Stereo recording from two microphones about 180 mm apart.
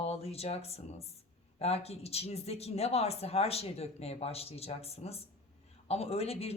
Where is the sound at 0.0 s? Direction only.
35° left (ahead or behind).